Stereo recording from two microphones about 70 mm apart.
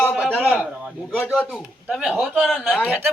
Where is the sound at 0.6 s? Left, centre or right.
Centre.